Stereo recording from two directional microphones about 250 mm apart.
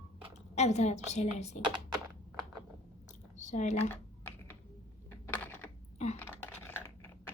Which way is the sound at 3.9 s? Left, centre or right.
Centre.